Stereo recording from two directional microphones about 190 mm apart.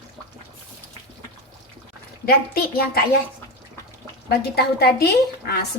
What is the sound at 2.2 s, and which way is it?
Speech, 55° left (ahead or behind).